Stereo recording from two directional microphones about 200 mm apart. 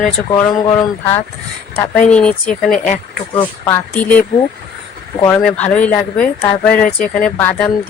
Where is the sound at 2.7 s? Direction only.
40° left (ahead or behind).